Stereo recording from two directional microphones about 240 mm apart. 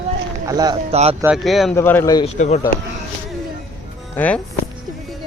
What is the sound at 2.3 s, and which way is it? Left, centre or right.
Speech, left.